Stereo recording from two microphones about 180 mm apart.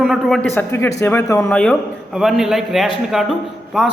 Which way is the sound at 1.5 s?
5° left (ahead or behind).